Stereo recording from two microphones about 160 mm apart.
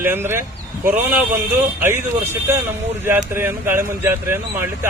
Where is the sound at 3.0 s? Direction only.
15° right (ahead or behind).